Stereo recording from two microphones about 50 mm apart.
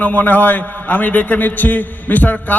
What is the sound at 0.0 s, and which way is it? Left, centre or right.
A man's voice, left.